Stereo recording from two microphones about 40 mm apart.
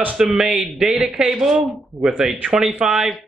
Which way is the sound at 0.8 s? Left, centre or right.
Right.